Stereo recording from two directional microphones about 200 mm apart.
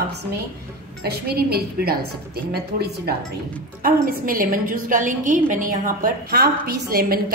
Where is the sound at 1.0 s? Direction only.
50° right (ahead or behind).